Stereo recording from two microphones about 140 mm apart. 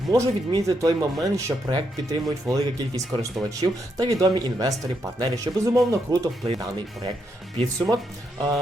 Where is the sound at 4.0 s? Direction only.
25° right (ahead or behind).